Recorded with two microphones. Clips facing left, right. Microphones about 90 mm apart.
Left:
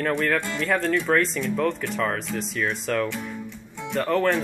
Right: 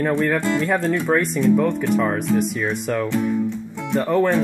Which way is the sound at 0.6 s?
15° right (ahead or behind).